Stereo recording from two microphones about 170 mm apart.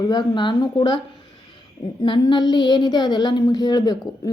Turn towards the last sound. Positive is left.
turn(degrees=25)  # may be behind; listen again after turning